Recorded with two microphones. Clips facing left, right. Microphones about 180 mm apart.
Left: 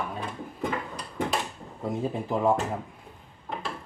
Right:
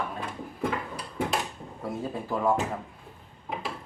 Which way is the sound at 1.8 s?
20° left (ahead or behind).